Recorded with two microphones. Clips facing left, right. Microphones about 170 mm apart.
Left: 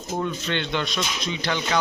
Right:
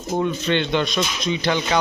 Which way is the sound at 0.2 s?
20° right (ahead or behind).